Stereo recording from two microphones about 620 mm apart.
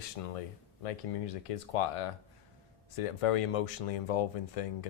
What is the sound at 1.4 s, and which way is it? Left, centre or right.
Speech, left.